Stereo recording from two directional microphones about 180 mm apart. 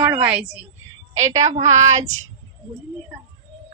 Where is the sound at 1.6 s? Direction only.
40° right (ahead or behind).